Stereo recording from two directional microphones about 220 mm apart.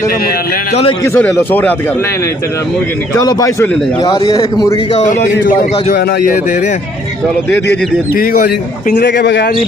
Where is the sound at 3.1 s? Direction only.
15° left (ahead or behind).